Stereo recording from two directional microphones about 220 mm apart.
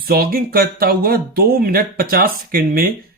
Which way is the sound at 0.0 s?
45° right (ahead or behind).